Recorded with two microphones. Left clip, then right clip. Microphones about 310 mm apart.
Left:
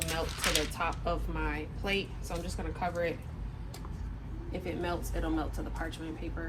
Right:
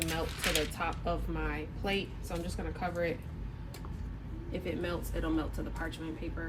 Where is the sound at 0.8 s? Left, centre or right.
Centre.